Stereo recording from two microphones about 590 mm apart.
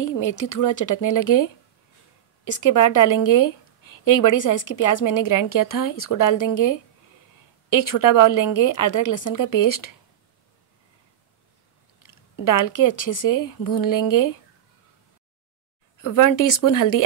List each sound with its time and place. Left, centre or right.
0.0 s a woman's voice: left
12.0 s a woman's voice: left
16.0 s a woman's voice: left